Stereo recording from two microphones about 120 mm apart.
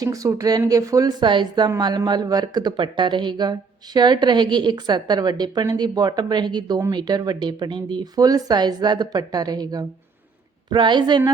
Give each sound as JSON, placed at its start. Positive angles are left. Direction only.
{"t": 0.0, "sound": "speech", "side_deg": -30}